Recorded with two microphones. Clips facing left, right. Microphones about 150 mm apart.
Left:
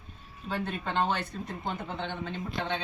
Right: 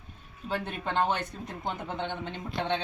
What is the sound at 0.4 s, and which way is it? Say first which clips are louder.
Speech: even; 15° right (ahead or behind).